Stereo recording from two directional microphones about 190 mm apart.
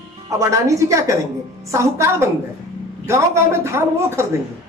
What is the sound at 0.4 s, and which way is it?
A woman's voice, 15° right (ahead or behind).